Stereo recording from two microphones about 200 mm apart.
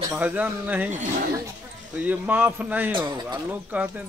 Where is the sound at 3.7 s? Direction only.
5° right (ahead or behind).